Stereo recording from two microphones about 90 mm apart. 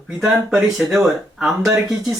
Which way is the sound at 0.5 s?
5° right (ahead or behind).